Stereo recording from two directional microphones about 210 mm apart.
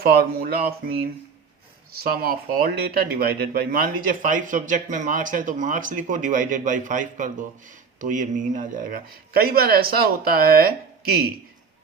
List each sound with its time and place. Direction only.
0.0 s speech: 45° right (ahead or behind)